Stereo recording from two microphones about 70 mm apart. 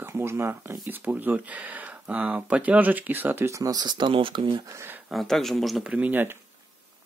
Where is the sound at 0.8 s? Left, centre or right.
Right.